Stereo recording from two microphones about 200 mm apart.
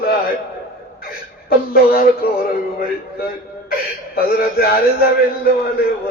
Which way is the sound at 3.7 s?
50° left (ahead or behind).